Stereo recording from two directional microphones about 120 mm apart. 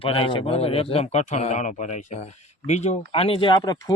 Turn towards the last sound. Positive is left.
turn(degrees=35)  # may be behind; listen again after turning